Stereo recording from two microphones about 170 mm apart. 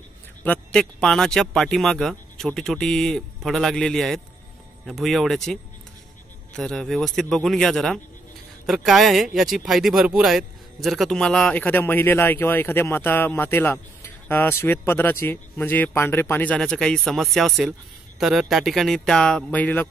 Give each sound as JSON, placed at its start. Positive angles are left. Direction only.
{"t": 0.4, "sound": "speech", "side_deg": 5}